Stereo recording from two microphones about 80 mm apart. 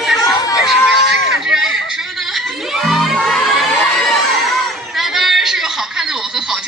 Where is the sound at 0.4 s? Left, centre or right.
Left.